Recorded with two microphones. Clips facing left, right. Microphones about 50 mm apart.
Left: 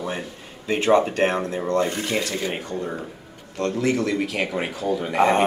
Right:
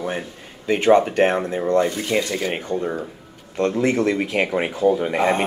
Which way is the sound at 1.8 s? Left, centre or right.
Left.